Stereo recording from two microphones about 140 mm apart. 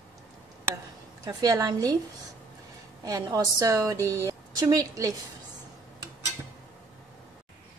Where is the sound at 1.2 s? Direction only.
25° right (ahead or behind).